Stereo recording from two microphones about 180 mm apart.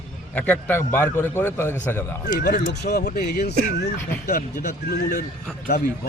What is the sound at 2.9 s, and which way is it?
Speech, 60° left (ahead or behind).